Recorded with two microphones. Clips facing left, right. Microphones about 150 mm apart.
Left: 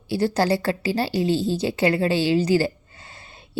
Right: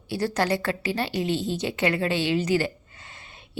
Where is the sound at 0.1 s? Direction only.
30° left (ahead or behind).